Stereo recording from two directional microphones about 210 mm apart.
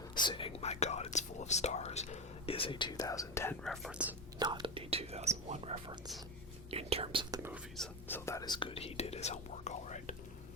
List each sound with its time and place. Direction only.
0.1 s speech: 20° left (ahead or behind)
3.6 s speech: centre (ahead or behind)
4.4 s speech: 20° right (ahead or behind)
8.0 s speech: 10° left (ahead or behind); by 10.2 s 35° left (ahead or behind)